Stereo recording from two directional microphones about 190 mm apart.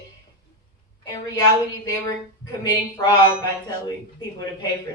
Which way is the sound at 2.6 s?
20° left (ahead or behind).